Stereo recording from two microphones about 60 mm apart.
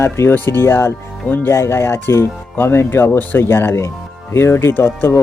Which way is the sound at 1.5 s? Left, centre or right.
Left.